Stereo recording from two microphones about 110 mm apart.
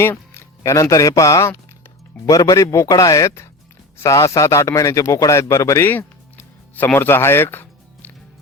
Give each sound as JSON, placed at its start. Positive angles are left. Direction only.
{"t": 0.0, "sound": "a man's voice", "side_deg": 20}